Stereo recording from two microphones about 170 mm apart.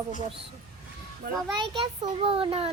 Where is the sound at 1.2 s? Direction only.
60° right (ahead or behind).